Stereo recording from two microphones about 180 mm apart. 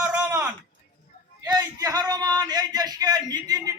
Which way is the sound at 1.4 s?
20° right (ahead or behind).